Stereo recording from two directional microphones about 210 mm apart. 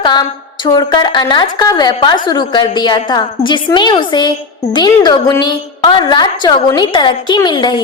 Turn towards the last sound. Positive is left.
turn(degrees=20)  # may be behind; listen again after turning